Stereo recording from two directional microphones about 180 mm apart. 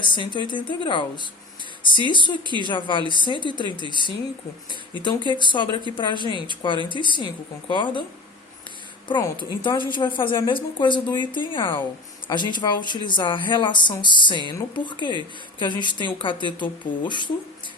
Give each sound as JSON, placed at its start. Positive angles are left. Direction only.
{"t": 0.0, "sound": "a woman's voice", "side_deg": 25}
{"t": 2.4, "sound": "speech", "side_deg": -25}
{"t": 2.6, "sound": "a woman's voice", "side_deg": 25}
{"t": 9.0, "sound": "a woman's voice", "side_deg": 25}